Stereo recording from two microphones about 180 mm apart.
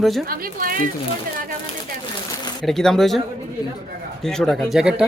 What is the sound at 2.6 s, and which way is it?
Speech, centre (ahead or behind).